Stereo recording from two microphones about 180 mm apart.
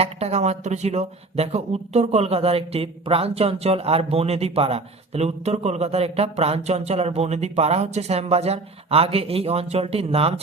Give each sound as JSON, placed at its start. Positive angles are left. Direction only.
{"t": 0.0, "sound": "speech", "side_deg": -35}